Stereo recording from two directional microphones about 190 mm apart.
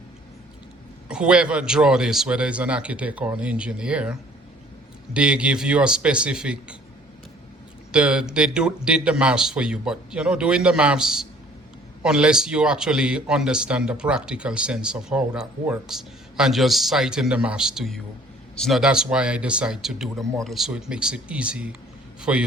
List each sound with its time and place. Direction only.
1.0 s a man's voice: 5° right (ahead or behind)
7.9 s a man's voice: 5° right (ahead or behind)